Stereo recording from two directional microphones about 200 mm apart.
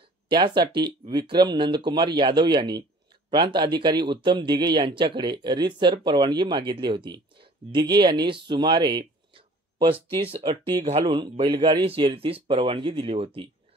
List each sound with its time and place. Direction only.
0.3 s speech: 20° right (ahead or behind)